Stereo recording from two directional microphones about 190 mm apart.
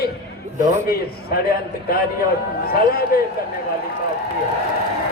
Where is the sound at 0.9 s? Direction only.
55° left (ahead or behind).